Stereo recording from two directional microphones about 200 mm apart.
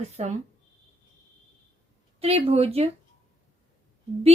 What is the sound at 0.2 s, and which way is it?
Speech, 35° right (ahead or behind).